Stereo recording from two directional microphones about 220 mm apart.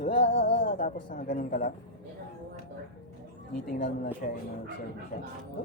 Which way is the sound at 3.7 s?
40° left (ahead or behind).